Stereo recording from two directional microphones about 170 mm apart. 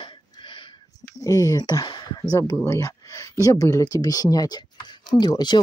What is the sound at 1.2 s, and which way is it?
Speech, 20° left (ahead or behind).